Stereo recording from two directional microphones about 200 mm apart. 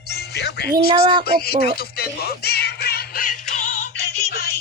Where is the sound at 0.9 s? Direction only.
25° right (ahead or behind).